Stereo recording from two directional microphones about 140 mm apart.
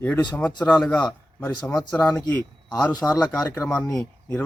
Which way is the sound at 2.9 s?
30° left (ahead or behind).